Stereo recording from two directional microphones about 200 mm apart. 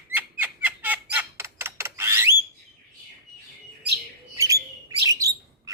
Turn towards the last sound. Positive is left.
turn(degrees=-15)  # may be behind; listen again after turning